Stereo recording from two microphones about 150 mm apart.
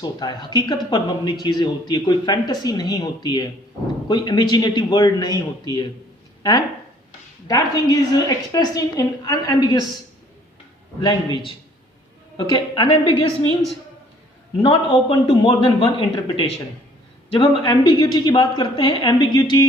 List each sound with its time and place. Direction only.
0.0 s speech: 30° left (ahead or behind)
7.4 s speech: 25° left (ahead or behind)
11.0 s a woman's voice: 30° left (ahead or behind)
14.6 s a woman's voice: 35° left (ahead or behind)